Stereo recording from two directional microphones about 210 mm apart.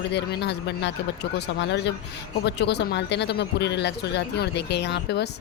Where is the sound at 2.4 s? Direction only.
55° left (ahead or behind).